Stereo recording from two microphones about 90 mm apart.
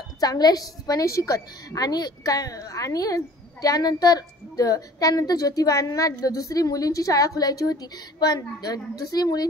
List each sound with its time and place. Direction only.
0.2 s a woman's voice: 45° left (ahead or behind)